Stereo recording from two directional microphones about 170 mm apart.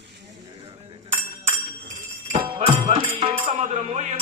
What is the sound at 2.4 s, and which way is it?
Music, 35° right (ahead or behind).